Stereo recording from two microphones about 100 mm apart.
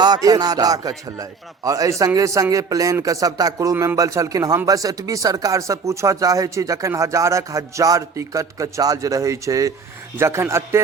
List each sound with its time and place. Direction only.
0.0 s a man's voice: 40° right (ahead or behind)